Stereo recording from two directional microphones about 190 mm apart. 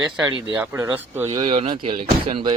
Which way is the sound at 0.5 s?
10° right (ahead or behind).